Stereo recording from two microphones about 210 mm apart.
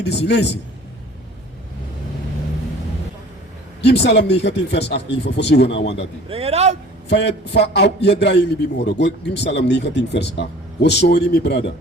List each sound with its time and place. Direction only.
0.0 s a man's voice: 55° left (ahead or behind)
3.8 s a man's voice: 55° left (ahead or behind)
6.2 s speech: 30° right (ahead or behind)
7.1 s a man's voice: 55° left (ahead or behind)